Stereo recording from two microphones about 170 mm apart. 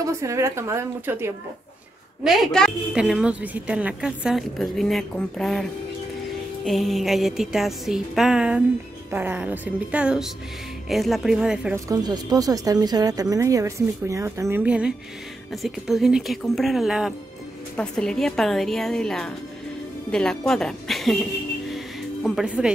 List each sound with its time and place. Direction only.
0.0 s a woman's voice: 15° right (ahead or behind)
2.2 s a woman's voice: centre (ahead or behind)
11.7 s speech: 20° right (ahead or behind)
14.6 s a woman's voice: 5° right (ahead or behind)
21.6 s music: centre (ahead or behind)